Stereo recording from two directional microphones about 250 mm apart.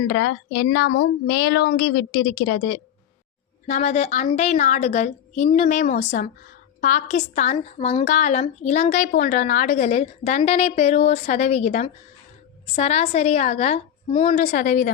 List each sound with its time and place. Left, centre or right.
0.1 s speech: left
3.7 s a woman's voice: left